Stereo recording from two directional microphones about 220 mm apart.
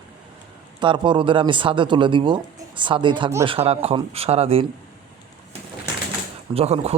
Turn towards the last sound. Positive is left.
turn(degrees=-25)  # may be behind; listen again after turning